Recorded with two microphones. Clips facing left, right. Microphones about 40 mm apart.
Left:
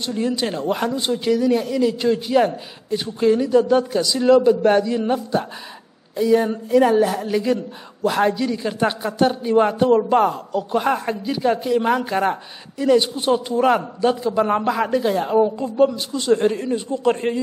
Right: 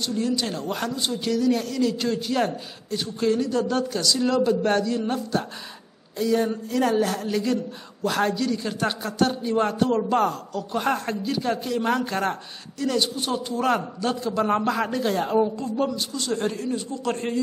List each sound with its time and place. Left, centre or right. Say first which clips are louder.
0.0 s speech: left 3 dB; left
1.2 s a man's voice: left 4 dB; centre
13.7 s a man's voice: left 6 dB; centre
15.4 s speech: left 7 dB; centre